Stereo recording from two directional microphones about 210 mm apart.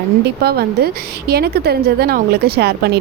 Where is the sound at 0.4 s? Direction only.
50° right (ahead or behind).